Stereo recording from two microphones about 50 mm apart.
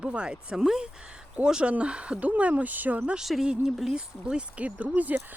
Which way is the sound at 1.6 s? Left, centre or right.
Right.